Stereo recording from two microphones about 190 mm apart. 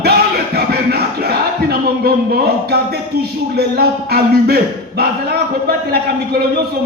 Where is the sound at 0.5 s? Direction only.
55° right (ahead or behind).